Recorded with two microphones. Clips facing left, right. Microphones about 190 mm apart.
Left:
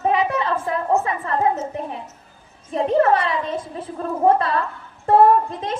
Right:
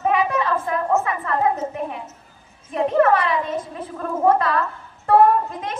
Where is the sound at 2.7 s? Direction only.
30° left (ahead or behind).